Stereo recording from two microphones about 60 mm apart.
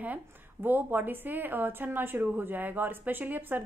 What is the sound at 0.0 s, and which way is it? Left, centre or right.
A woman's voice, right.